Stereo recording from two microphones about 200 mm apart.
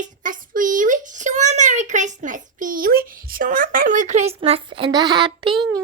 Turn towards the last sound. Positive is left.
turn(degrees=-25)  # may be behind; listen again after turning